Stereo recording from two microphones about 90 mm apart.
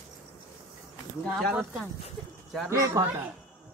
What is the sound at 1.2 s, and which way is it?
Speech, 5° left (ahead or behind).